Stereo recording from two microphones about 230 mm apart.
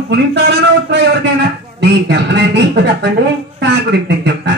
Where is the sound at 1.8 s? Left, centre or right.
Right.